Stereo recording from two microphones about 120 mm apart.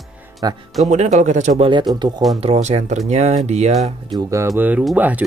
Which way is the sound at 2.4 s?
60° right (ahead or behind).